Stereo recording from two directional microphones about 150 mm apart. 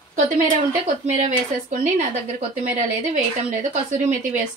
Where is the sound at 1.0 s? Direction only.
50° right (ahead or behind).